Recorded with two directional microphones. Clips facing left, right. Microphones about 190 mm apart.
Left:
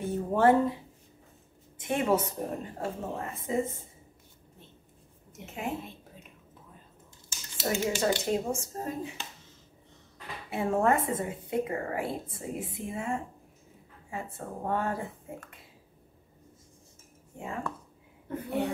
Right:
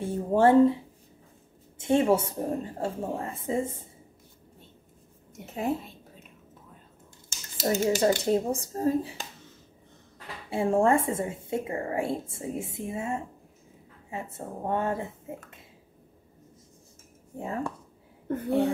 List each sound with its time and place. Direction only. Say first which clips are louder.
0.0 s speech: right 2 dB; 30° right (ahead or behind)
1.8 s speech: right 4 dB; 30° right (ahead or behind)
5.5 s speech: right 6 dB; 35° right (ahead or behind)
7.2 s speech: right 4 dB; 40° right (ahead or behind)
10.5 s speech: right 3 dB; 30° right (ahead or behind)
17.4 s speech: right 4 dB; 35° right (ahead or behind)